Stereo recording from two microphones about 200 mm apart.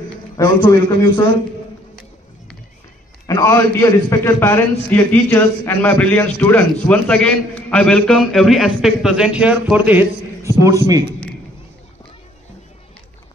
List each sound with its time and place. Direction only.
0.4 s a man's voice: 15° left (ahead or behind)
3.3 s a man's voice: 15° left (ahead or behind); by 11.1 s 15° right (ahead or behind)